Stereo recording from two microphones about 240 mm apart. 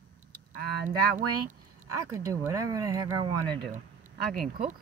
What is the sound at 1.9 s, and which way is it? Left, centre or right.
Speech, centre.